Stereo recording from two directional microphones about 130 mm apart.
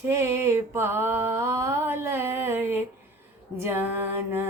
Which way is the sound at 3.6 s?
15° right (ahead or behind).